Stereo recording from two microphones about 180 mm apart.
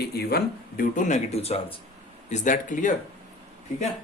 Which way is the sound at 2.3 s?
45° left (ahead or behind).